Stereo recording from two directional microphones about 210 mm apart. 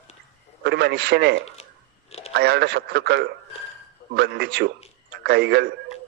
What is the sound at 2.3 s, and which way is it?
A man's voice, 50° right (ahead or behind).